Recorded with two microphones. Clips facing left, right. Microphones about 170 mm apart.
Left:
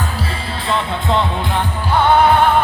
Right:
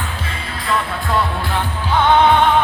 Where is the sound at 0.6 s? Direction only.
25° left (ahead or behind).